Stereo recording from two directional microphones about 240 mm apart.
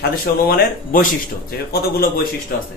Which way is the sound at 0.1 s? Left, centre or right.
Left.